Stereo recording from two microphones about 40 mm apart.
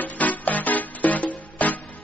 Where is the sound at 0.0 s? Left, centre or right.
Left.